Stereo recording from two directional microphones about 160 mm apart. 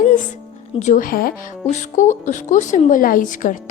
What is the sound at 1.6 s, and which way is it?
Speech, 45° left (ahead or behind).